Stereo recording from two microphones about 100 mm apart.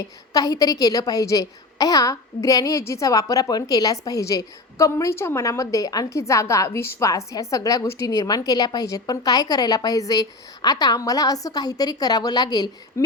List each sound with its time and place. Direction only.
0.0 s a woman's voice: 40° left (ahead or behind)